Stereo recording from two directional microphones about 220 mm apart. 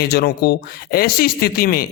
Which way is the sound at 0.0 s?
45° left (ahead or behind).